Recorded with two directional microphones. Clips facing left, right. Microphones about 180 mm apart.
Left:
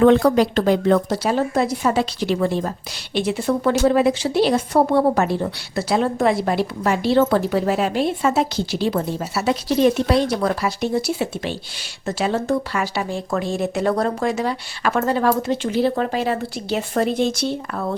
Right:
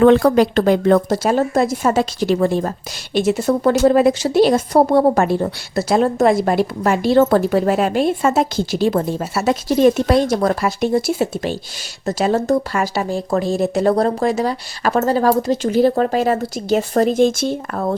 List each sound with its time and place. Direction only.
0.0 s a woman's voice: 60° right (ahead or behind)